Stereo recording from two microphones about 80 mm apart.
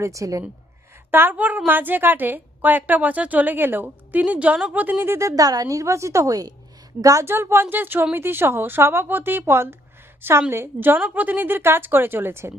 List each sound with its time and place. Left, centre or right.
0.0 s a woman's voice: right
1.1 s a woman's voice: right
5.3 s a woman's voice: right
7.3 s a woman's voice: right